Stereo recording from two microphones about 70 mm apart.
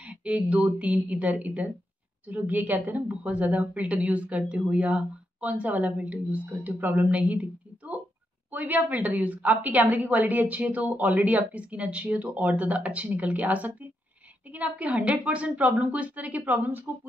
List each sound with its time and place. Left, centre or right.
0.0 s speech: centre